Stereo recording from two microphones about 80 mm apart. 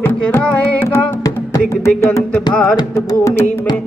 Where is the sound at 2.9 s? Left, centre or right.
Left.